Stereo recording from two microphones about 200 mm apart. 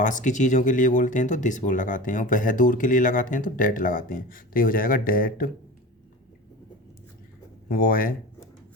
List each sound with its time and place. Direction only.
0.0 s speech: 40° left (ahead or behind)
7.7 s speech: 45° left (ahead or behind)